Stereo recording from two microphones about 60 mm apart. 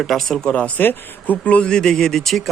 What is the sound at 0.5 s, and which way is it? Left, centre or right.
Speech, left.